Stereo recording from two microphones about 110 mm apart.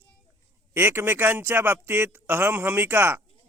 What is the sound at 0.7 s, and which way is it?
Speech, 20° right (ahead or behind).